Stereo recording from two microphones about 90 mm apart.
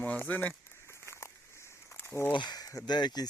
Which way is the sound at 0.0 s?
15° left (ahead or behind).